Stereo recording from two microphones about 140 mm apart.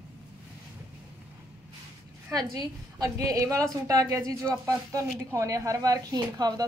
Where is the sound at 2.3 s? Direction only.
25° right (ahead or behind).